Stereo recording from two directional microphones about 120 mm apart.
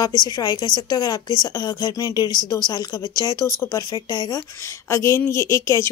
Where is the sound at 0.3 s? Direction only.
30° left (ahead or behind).